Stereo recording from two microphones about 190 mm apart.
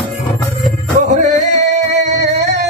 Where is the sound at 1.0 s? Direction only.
40° right (ahead or behind).